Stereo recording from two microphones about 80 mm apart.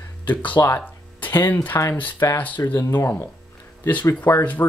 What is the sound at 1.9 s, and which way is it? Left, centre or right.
Speech, left.